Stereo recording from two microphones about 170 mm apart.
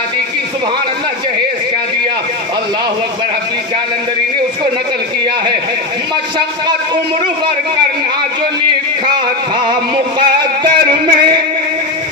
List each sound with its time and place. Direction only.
9.7 s music: 25° right (ahead or behind)